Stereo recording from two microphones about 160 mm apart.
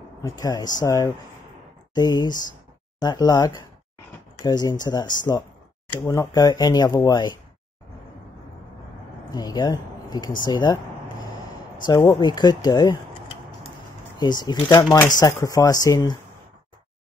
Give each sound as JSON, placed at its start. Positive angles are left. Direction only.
{"t": 0.2, "sound": "speech", "side_deg": 25}
{"t": 9.3, "sound": "speech", "side_deg": 25}
{"t": 12.2, "sound": "speech", "side_deg": 25}